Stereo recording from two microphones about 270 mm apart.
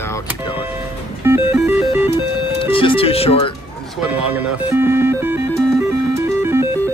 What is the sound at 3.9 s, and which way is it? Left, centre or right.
Music, centre.